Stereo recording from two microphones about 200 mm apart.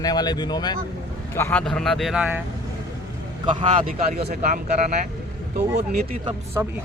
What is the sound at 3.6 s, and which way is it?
Speech, 35° right (ahead or behind).